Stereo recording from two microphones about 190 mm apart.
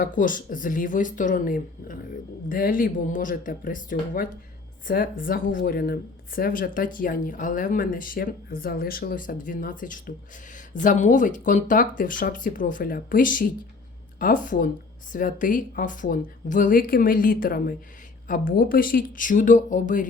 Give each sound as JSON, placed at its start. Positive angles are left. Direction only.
{"t": 0.0, "sound": "speech", "side_deg": 45}